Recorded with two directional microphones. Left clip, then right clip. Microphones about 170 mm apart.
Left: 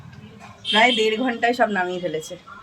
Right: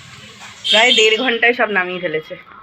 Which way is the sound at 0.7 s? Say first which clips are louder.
Right 6 dB; 20° right (ahead or behind).